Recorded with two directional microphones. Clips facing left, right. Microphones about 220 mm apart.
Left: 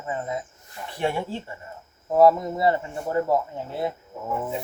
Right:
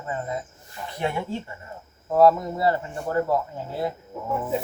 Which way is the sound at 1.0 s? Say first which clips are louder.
Left 1 dB; 30° left (ahead or behind).